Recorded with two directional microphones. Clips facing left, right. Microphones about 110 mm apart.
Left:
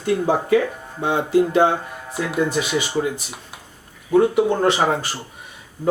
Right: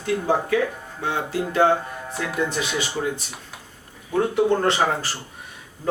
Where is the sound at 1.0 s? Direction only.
20° left (ahead or behind).